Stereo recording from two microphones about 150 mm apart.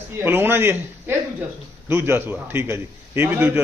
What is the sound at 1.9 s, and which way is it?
A man's voice, 15° right (ahead or behind).